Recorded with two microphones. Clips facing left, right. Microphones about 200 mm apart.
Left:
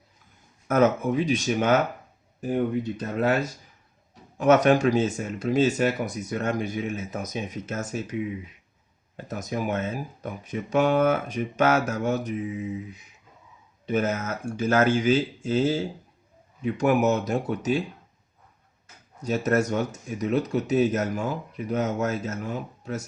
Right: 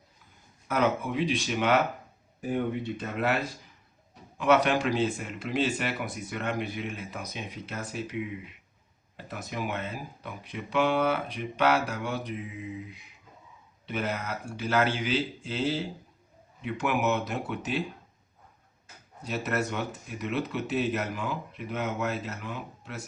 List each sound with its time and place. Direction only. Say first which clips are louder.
0.7 s speech: left 6 dB; 45° left (ahead or behind)
3.0 s speech: left 5 dB; 40° left (ahead or behind)
9.1 s speech: left 6 dB; 45° left (ahead or behind)
13.8 s speech: left 7 dB; 45° left (ahead or behind)
19.2 s speech: left 7 dB; 45° left (ahead or behind)